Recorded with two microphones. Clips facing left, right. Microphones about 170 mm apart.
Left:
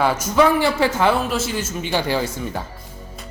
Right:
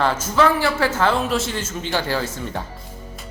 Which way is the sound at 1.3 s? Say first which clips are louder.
Even; 5° left (ahead or behind).